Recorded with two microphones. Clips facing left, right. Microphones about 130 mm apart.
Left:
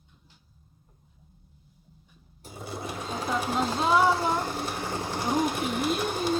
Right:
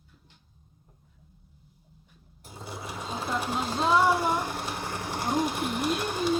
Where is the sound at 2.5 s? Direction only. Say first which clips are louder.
Left 3 dB; 15° left (ahead or behind).